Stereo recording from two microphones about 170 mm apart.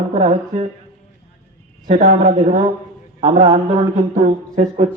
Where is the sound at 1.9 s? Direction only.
60° right (ahead or behind).